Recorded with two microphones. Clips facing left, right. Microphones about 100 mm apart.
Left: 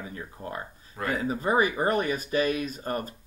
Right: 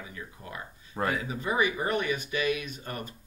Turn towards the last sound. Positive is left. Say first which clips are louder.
# left 7 dB
turn(degrees=40)  # may be behind; listen again after turning